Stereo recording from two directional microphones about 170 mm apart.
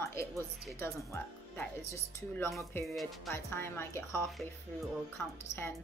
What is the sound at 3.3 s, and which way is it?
Speech, 15° left (ahead or behind).